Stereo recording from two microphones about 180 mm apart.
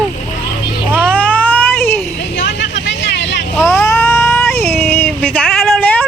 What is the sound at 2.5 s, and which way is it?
Vehicle, 85° left.